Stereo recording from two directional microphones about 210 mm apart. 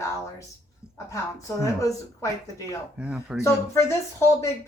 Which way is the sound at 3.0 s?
5° right (ahead or behind).